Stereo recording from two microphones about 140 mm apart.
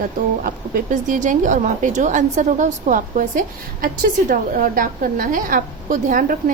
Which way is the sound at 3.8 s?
85° right.